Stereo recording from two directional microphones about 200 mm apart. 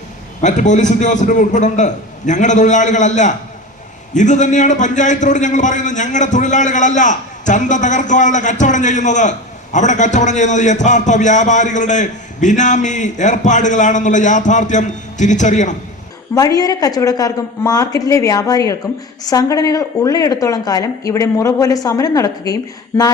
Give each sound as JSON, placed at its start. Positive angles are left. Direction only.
{"t": 0.4, "sound": "a man's voice", "side_deg": 35}
{"t": 16.3, "sound": "speech", "side_deg": 20}